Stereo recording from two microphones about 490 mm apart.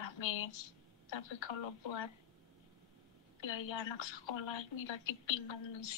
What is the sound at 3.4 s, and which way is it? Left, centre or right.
Speech, left.